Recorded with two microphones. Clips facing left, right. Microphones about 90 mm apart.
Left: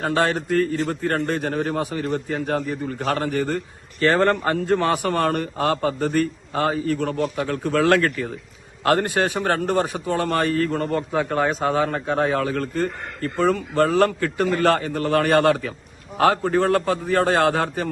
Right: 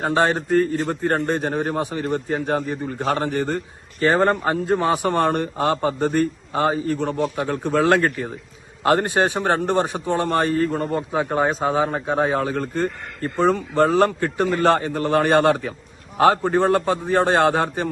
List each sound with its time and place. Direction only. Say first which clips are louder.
0.0 s speech: right 2 dB; 25° right (ahead or behind)
4.0 s speech: even; 15° right (ahead or behind)
10.7 s speech: even; 10° right (ahead or behind)